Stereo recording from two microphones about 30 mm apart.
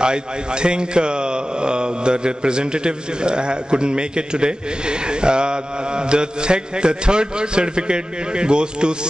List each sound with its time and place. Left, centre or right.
0.0 s speech: right